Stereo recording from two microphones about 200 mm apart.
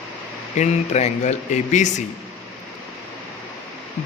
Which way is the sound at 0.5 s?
35° left (ahead or behind).